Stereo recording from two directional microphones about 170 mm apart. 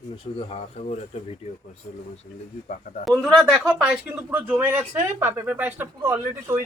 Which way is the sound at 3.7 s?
5° right (ahead or behind).